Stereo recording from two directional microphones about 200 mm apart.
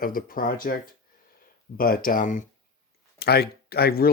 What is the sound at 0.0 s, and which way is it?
Speech, 45° left (ahead or behind).